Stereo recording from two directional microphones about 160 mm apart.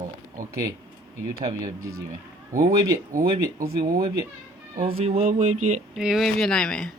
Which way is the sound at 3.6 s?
70° right (ahead or behind).